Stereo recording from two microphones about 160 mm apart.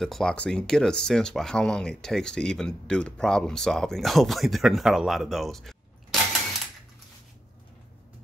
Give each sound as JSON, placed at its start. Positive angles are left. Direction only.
{"t": 0.0, "sound": "speech", "side_deg": 5}